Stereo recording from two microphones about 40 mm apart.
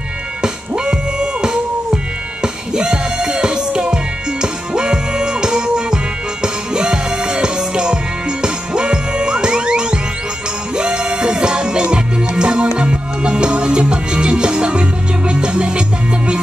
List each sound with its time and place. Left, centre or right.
0.4 s music: right